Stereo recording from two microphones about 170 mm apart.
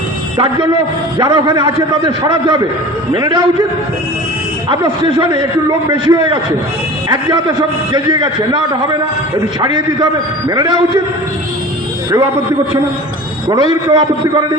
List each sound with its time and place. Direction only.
0.3 s a man's voice: 30° right (ahead or behind)
4.7 s a man's voice: 25° right (ahead or behind)
13.5 s a man's voice: 25° right (ahead or behind)